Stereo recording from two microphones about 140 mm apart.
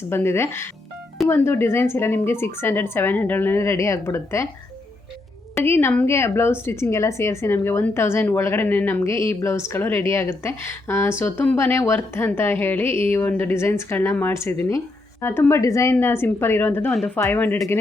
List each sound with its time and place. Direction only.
0.1 s a woman's voice: 15° left (ahead or behind)
5.5 s a woman's voice: 15° left (ahead or behind)